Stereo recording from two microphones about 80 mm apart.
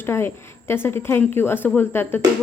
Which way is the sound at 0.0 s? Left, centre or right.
Left.